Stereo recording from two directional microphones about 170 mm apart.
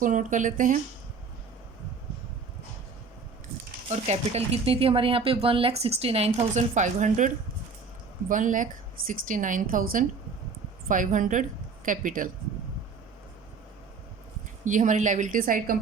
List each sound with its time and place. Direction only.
0.0 s a woman's voice: 50° right (ahead or behind)
3.8 s a woman's voice: 40° right (ahead or behind)
14.6 s a woman's voice: 45° right (ahead or behind)